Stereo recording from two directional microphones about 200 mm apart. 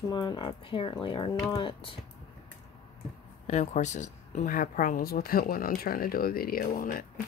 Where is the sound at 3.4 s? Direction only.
35° left (ahead or behind).